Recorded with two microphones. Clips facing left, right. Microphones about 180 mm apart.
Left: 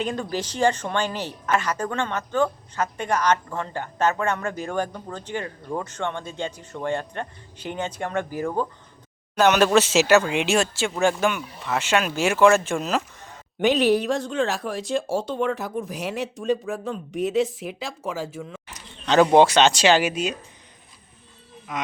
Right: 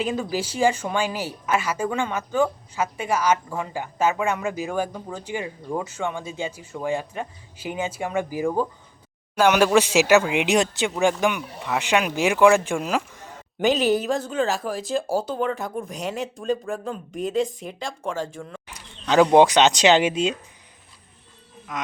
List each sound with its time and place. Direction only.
0.0 s a woman's voice: 5° right (ahead or behind)
13.1 s a sound: 10° right (ahead or behind)
13.7 s speech: centre (ahead or behind)
18.7 s bird: 10° right (ahead or behind)
19.4 s speech: 15° right (ahead or behind)
21.7 s speech: centre (ahead or behind)